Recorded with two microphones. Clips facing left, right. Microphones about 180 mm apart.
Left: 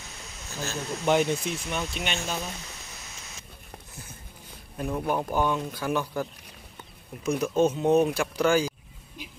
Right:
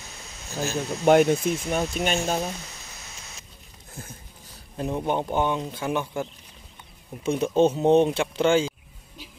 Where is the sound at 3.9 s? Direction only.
50° right (ahead or behind).